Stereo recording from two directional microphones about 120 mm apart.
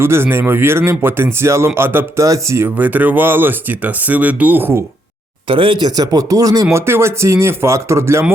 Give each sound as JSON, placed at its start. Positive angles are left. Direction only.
{"t": 0.0, "sound": "speech", "side_deg": -20}
{"t": 5.5, "sound": "speech", "side_deg": -45}